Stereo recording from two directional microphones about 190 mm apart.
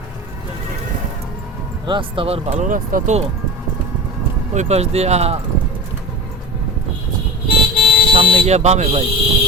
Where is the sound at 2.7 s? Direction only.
45° right (ahead or behind).